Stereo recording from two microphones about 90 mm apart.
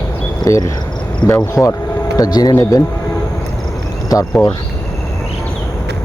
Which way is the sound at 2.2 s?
50° left (ahead or behind).